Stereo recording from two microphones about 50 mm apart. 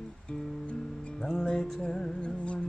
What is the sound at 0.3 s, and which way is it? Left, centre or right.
Music, left.